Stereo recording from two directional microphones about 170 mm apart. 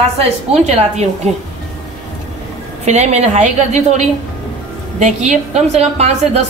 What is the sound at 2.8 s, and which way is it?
A woman's voice, 40° right (ahead or behind).